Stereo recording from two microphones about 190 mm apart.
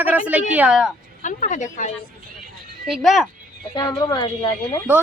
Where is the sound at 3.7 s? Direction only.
20° left (ahead or behind).